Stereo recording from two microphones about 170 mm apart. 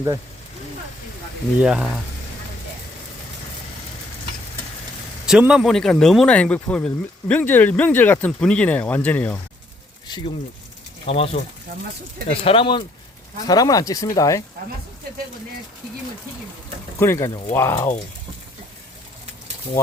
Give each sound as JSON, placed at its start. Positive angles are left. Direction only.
{"t": 1.6, "sound": "speech", "side_deg": -5}
{"t": 5.2, "sound": "speech", "side_deg": -5}
{"t": 10.1, "sound": "speech", "side_deg": 25}
{"t": 11.0, "sound": "speech", "side_deg": 35}
{"t": 17.0, "sound": "speech", "side_deg": 15}